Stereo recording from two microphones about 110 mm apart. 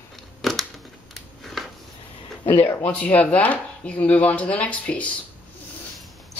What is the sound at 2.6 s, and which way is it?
Speech, 20° left (ahead or behind).